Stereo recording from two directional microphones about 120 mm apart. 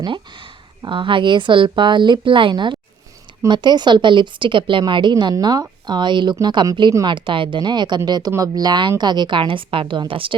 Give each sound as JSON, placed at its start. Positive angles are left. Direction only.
{"t": 0.8, "sound": "a woman's voice", "side_deg": -45}